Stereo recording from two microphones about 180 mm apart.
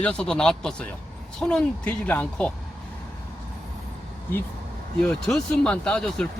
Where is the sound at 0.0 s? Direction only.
5° left (ahead or behind).